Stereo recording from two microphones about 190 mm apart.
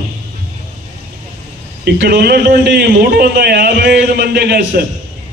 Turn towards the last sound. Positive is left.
turn(degrees=-55)  # may be behind; listen again after turning